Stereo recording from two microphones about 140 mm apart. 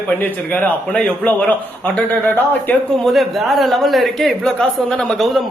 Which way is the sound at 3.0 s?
Centre (ahead or behind).